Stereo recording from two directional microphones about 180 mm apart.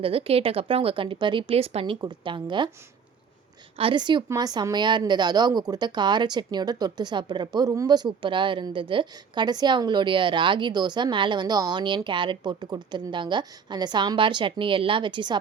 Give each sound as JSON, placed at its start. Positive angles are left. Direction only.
{"t": 0.0, "sound": "speech", "side_deg": -30}
{"t": 3.8, "sound": "a woman's voice", "side_deg": -30}